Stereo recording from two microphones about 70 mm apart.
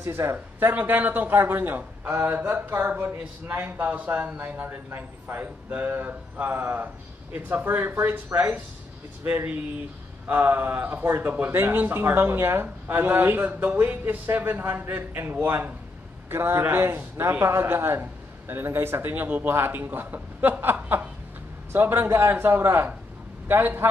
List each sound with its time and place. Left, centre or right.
0.0 s speech: right
2.3 s speech: right